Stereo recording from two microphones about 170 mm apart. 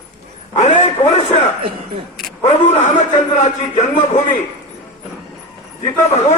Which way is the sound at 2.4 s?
40° left (ahead or behind).